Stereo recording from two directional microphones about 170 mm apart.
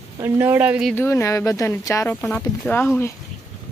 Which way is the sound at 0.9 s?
15° left (ahead or behind).